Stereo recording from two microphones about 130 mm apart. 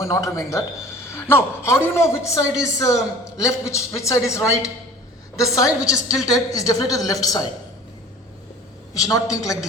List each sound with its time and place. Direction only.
0.0 s a man's voice: 25° left (ahead or behind)
9.0 s a man's voice: 25° left (ahead or behind)